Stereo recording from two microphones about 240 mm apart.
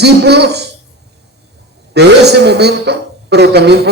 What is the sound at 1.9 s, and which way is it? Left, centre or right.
A man's voice, right.